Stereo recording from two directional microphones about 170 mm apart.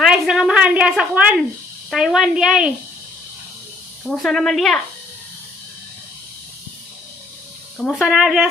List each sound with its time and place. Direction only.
0.0 s a sound: centre (ahead or behind)
1.9 s a woman's voice: centre (ahead or behind)
4.0 s a woman's voice: centre (ahead or behind)
7.9 s a woman's voice: centre (ahead or behind)